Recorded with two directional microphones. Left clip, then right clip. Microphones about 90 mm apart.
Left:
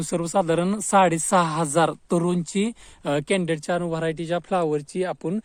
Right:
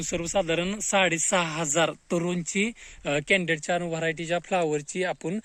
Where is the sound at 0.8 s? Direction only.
45° left (ahead or behind).